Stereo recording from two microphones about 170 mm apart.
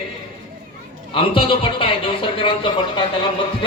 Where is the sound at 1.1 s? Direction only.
30° left (ahead or behind).